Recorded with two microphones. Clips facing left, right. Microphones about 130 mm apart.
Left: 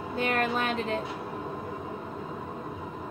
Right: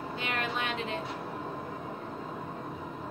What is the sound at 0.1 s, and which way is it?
Speech, 45° left (ahead or behind).